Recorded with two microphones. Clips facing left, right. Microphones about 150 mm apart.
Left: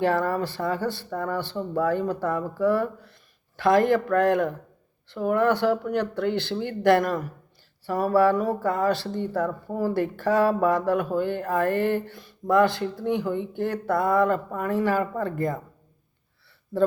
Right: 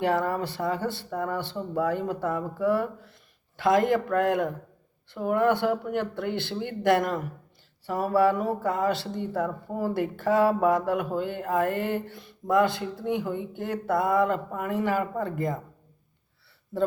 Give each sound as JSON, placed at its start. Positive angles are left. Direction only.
{"t": 0.0, "sound": "speech", "side_deg": -20}